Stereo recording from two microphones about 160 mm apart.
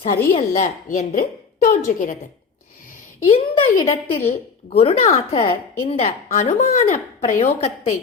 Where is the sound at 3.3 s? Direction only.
35° left (ahead or behind).